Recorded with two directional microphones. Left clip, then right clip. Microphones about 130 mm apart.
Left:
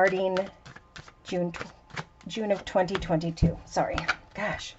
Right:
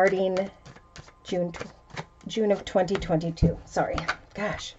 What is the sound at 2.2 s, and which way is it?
Speech, 30° right (ahead or behind).